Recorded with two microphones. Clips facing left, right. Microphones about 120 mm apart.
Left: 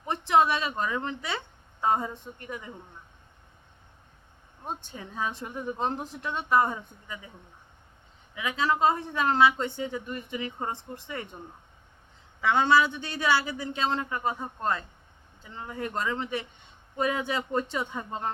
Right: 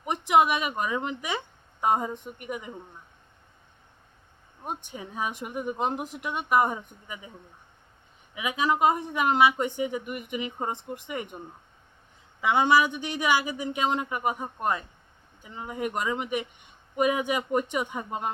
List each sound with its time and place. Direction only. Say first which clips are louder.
0.0 s a woman's voice: right 1 dB; 15° right (ahead or behind)
4.6 s a woman's voice: right 2 dB; 15° right (ahead or behind)
8.4 s a woman's voice: right 1 dB; 15° right (ahead or behind)
12.4 s a woman's voice: right 1 dB; 15° right (ahead or behind)